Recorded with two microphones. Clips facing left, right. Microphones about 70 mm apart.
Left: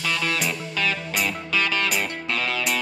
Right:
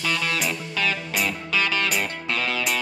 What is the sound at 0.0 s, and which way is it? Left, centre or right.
Music, centre.